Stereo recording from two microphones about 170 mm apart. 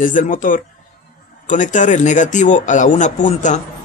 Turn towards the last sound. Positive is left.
turn(degrees=45)  # may be behind; listen again after turning